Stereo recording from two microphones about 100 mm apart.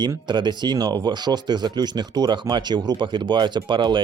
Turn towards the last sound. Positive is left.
turn(degrees=-50)  # may be behind; listen again after turning